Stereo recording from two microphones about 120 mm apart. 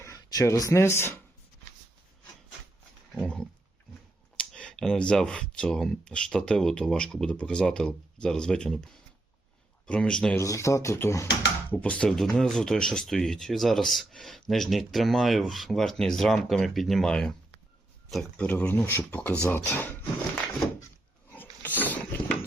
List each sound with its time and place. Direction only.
0.0 s speech: 30° left (ahead or behind)
4.4 s speech: 10° left (ahead or behind)
10.3 s speech: 25° left (ahead or behind)
11.7 s speech: 10° left (ahead or behind)
21.8 s a sound: 15° left (ahead or behind)